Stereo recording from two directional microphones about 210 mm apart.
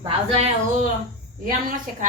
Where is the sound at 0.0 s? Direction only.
30° right (ahead or behind).